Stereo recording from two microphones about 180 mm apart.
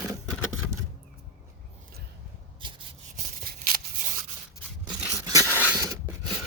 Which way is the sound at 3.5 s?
55° right (ahead or behind).